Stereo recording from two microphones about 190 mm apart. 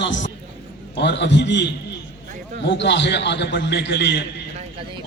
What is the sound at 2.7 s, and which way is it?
A man's voice, 65° left (ahead or behind).